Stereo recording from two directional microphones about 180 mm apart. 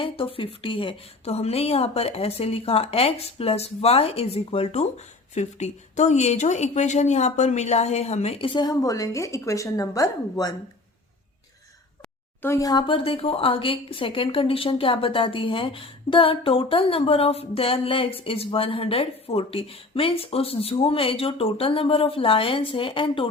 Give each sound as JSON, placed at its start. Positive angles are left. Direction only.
{"t": 0.0, "sound": "speech", "side_deg": 30}
{"t": 12.4, "sound": "speech", "side_deg": 15}